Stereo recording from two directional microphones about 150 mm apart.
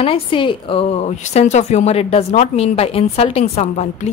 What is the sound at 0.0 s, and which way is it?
A woman's voice, 40° left (ahead or behind).